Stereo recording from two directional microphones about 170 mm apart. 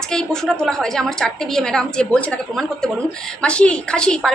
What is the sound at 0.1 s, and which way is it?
A woman's voice, 5° left (ahead or behind).